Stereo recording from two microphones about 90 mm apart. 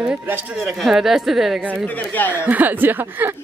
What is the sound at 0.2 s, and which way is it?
Speech, 20° right (ahead or behind).